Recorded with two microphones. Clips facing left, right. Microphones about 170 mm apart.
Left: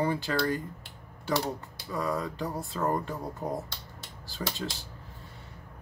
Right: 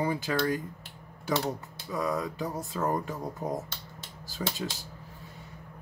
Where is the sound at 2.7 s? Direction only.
Centre (ahead or behind).